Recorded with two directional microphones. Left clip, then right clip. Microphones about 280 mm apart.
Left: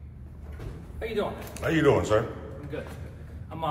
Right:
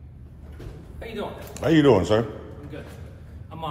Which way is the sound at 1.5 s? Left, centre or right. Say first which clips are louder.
Right 5 dB; right.